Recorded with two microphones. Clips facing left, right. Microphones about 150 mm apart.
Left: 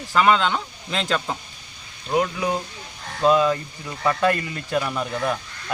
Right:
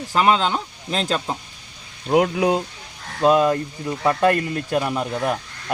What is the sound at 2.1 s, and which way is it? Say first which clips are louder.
Speech: right 5 dB; 65° right (ahead or behind).